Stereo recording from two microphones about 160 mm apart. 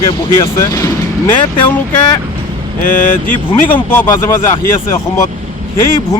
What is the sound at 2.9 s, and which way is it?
Speech, 55° left (ahead or behind).